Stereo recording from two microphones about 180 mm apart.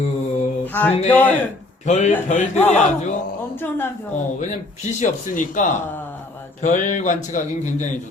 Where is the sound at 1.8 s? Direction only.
40° left (ahead or behind).